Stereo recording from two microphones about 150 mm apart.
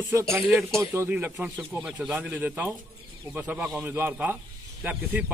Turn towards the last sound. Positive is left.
turn(degrees=-10)  # may be behind; listen again after turning